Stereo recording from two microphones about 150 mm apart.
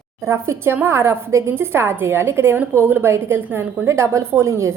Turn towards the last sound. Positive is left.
turn(degrees=-20)  # may be behind; listen again after turning